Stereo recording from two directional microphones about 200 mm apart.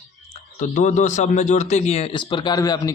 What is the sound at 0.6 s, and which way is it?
A man's voice, 35° left (ahead or behind).